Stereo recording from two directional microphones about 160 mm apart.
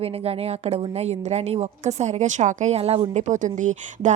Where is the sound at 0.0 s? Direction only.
40° right (ahead or behind).